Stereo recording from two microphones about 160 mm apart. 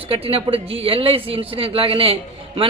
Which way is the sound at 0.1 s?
35° right (ahead or behind).